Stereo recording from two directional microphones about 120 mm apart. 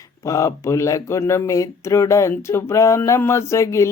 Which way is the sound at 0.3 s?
25° left (ahead or behind).